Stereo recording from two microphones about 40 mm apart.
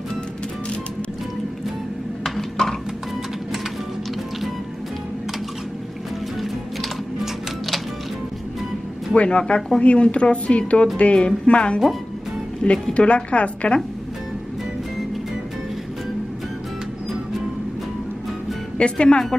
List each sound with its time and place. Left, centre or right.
2.6 s music: centre
9.1 s a woman's voice: left
18.8 s speech: left